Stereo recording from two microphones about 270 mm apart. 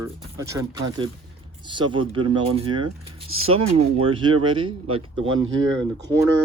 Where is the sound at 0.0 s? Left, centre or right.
Centre.